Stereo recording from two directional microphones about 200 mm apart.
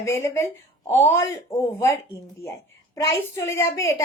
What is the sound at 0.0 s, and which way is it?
Speech, 15° left (ahead or behind).